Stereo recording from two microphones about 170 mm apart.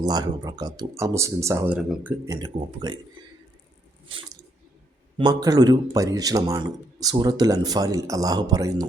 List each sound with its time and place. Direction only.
0.0 s speech: 20° right (ahead or behind)
2.2 s speech: 25° right (ahead or behind)
5.1 s speech: 25° right (ahead or behind)